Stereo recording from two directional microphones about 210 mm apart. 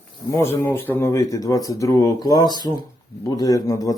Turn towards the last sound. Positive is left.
turn(degrees=15)  # may be behind; listen again after turning